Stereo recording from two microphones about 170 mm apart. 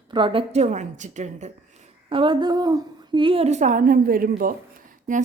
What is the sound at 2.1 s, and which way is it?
A woman's voice, 30° right (ahead or behind).